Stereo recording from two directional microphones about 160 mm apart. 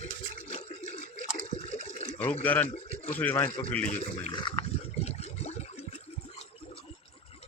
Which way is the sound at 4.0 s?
35° left (ahead or behind).